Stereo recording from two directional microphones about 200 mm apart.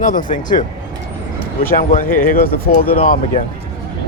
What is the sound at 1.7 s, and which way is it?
Speech, 45° left (ahead or behind).